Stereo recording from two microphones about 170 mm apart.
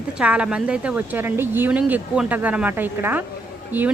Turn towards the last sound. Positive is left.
turn(degrees=-10)  # may be behind; listen again after turning